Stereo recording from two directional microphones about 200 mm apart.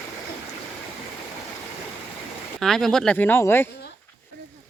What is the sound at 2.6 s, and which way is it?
Speech, centre (ahead or behind).